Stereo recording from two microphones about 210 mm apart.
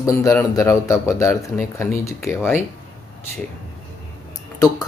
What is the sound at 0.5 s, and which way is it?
Speech, 15° left (ahead or behind).